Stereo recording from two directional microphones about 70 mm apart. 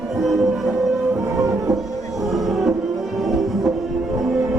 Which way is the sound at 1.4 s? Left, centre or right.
Right.